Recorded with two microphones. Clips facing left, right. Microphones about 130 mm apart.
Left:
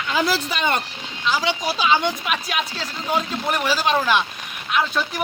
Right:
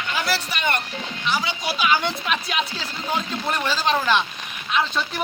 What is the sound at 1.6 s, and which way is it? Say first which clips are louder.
Speech: left 1 dB; 30° left (ahead or behind).